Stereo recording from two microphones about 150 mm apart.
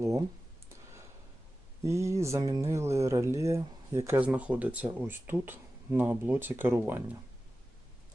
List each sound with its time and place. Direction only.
1.8 s speech: 20° right (ahead or behind)